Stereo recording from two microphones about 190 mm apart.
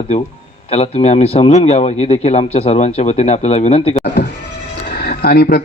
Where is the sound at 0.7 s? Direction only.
35° left (ahead or behind).